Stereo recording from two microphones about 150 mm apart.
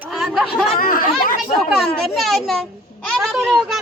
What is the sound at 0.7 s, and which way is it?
Speech, 70° left (ahead or behind).